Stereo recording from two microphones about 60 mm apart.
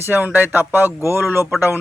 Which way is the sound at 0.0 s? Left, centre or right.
Right.